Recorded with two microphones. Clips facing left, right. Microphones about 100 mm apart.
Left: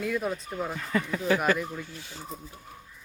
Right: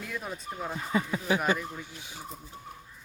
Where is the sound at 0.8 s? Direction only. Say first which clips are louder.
Right 1 dB; 20° right (ahead or behind).